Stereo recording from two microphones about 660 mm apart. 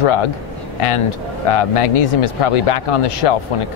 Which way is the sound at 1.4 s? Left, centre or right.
Left.